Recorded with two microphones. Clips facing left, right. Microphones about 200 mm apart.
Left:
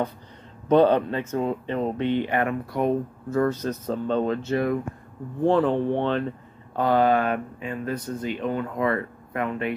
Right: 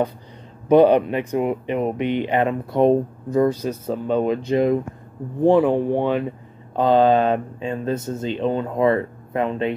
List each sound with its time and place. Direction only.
0.7 s speech: 15° right (ahead or behind)